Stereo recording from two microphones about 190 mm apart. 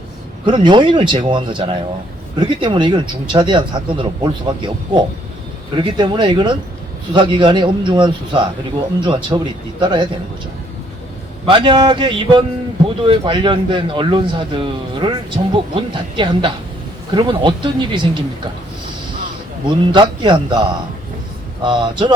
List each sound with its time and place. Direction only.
0.4 s speech: 25° right (ahead or behind)
11.4 s speech: 25° right (ahead or behind)
19.6 s speech: 25° right (ahead or behind)
21.6 s speech: 25° right (ahead or behind)